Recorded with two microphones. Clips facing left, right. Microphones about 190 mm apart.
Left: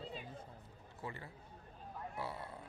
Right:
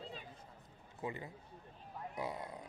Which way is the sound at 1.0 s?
20° right (ahead or behind).